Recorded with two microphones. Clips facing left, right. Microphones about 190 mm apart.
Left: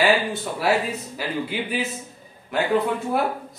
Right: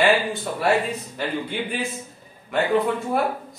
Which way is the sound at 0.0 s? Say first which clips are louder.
Right 1 dB; centre (ahead or behind).